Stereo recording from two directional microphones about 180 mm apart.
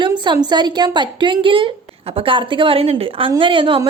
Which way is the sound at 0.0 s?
25° right (ahead or behind).